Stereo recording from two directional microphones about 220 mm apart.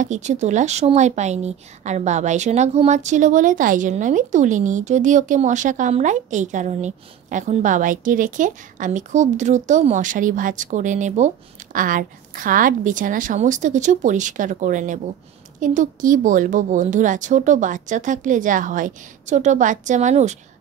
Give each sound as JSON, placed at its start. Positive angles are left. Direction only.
{"t": 0.0, "sound": "speech", "side_deg": -35}